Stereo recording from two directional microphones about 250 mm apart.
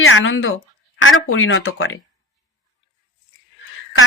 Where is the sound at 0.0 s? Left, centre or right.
Left.